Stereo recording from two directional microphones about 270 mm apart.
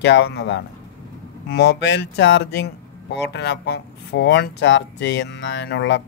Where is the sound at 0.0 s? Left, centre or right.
Left.